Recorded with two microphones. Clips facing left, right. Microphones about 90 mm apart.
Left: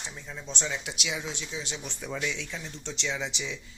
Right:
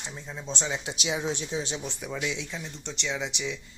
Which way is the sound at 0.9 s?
35° right (ahead or behind).